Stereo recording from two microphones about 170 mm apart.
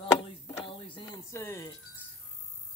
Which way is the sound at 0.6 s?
30° left (ahead or behind).